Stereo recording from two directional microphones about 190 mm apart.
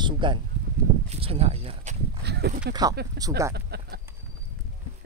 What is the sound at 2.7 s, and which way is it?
Speech, 20° right (ahead or behind).